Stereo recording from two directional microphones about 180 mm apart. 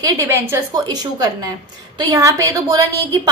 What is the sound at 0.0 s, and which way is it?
A woman's voice, 15° right (ahead or behind).